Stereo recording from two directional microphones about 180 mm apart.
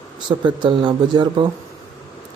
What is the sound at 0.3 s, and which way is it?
Speech, 25° right (ahead or behind).